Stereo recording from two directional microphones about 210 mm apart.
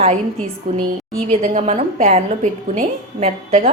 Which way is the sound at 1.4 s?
35° right (ahead or behind).